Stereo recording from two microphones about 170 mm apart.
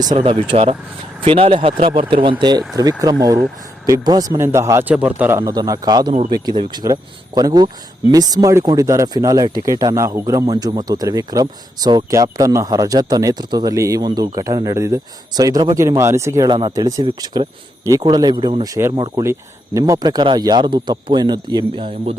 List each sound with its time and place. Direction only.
0.0 s speech: 30° right (ahead or behind)